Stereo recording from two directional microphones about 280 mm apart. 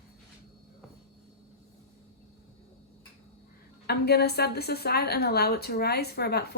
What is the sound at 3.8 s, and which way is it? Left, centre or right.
A woman's voice, left.